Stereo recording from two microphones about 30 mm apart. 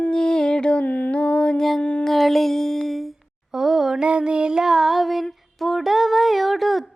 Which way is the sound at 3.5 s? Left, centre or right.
Centre.